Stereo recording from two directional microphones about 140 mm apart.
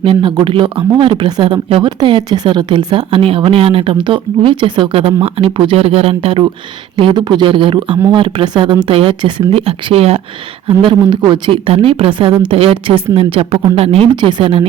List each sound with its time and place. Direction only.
0.0 s speech: 35° right (ahead or behind)
11.1 s speech: 35° right (ahead or behind)